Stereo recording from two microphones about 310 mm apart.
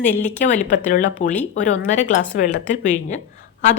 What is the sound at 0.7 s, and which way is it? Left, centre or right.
Speech, left.